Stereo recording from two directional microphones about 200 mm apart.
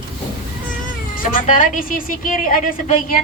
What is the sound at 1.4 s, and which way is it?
A woman's voice, 45° left (ahead or behind).